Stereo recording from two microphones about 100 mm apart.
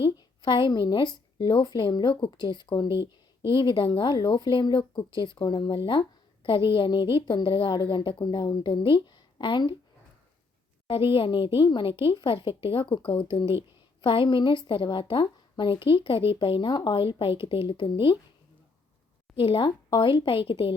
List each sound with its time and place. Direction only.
0.2 s speech: 50° left (ahead or behind)
11.1 s a woman's voice: 60° left (ahead or behind)
13.4 s speech: 25° right (ahead or behind)
14.0 s a woman's voice: 55° left (ahead or behind)
17.0 s a woman's voice: 65° left (ahead or behind)
19.4 s a woman's voice: 60° left (ahead or behind)